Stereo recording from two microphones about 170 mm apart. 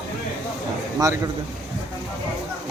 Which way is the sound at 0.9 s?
20° right (ahead or behind).